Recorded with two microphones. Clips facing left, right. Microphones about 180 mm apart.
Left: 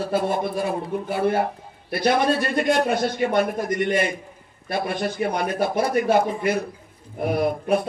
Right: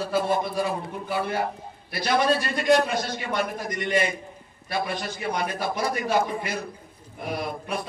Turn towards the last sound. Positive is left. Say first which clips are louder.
# left 9 dB
turn(degrees=55)  # may be behind; listen again after turning